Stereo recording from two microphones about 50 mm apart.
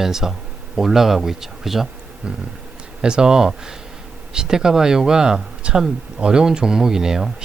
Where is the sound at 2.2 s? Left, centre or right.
Centre.